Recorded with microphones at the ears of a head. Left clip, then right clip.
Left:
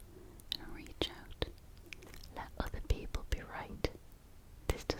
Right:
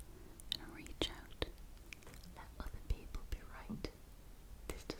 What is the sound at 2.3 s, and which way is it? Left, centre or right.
Whispering, left.